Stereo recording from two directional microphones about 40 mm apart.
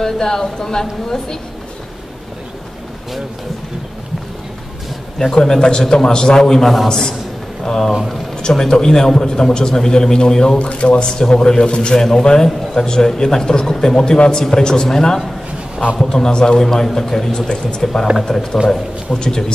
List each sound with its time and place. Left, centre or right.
0.0 s a man's voice: centre
5.2 s a man's voice: centre
10.6 s a man's voice: left; by 17.5 s centre
17.5 s a man's voice: centre